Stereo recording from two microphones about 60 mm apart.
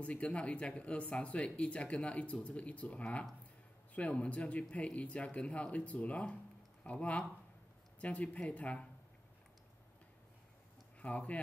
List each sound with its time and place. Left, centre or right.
0.0 s speech: centre
11.0 s speech: left